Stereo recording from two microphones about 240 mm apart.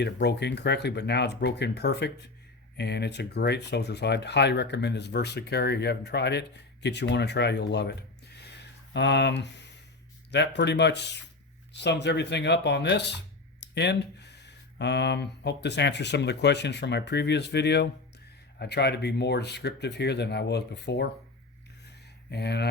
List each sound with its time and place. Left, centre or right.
0.0 s speech: left
8.4 s a sound: left
10.3 s speech: left
22.3 s speech: left